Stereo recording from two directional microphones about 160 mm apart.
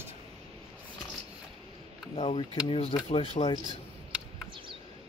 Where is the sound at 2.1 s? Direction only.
35° left (ahead or behind).